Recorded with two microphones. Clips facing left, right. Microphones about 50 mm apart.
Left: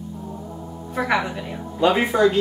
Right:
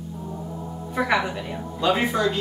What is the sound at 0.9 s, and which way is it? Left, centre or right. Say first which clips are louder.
Speech: left 1 dB; centre.